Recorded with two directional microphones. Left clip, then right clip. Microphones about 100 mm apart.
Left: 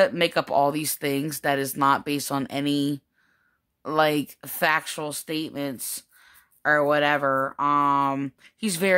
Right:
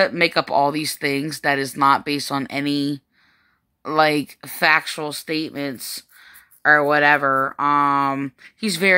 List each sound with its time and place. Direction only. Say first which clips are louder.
0.0 s speech: right 3 dB; 40° left (ahead or behind)